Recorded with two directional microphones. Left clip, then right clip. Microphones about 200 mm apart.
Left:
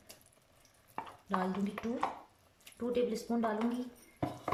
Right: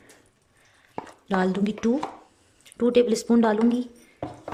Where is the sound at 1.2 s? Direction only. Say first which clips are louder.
Right 11 dB; 50° right (ahead or behind).